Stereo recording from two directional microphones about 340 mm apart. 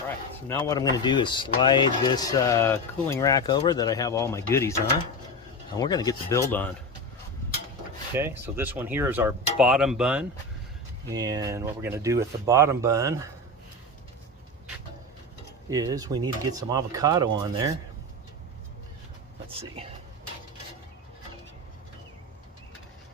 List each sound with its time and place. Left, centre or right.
0.4 s speech: centre
5.7 s speech: centre
8.1 s speech: centre
15.7 s speech: centre
19.5 s speech: centre